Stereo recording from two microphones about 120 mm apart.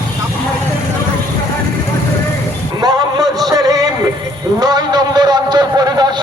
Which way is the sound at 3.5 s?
30° right (ahead or behind).